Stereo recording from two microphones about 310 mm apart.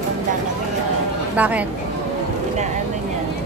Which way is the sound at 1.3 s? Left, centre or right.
Centre.